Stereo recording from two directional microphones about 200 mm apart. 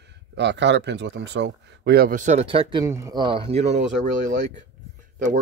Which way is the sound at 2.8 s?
15° right (ahead or behind).